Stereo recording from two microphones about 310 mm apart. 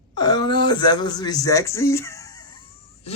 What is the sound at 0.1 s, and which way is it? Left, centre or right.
Speech, centre.